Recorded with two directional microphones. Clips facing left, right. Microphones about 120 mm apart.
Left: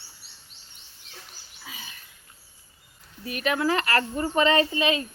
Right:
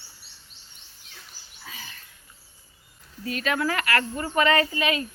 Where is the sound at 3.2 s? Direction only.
20° left (ahead or behind).